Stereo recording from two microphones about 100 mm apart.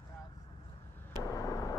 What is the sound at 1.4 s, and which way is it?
Vehicle, 35° left (ahead or behind).